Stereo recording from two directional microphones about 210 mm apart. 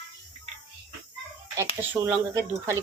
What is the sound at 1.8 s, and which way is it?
Speech, 10° right (ahead or behind).